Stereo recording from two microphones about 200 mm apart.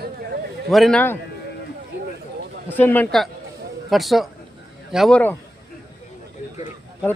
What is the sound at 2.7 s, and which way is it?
A man's voice, 10° left (ahead or behind).